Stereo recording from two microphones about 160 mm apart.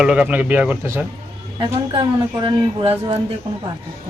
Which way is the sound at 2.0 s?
30° right (ahead or behind).